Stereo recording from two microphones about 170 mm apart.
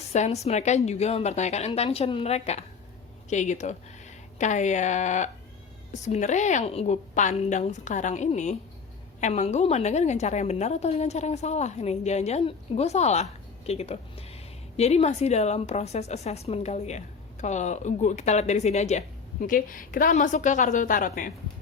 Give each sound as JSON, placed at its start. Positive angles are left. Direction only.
{"t": 0.1, "sound": "a woman's voice", "side_deg": 40}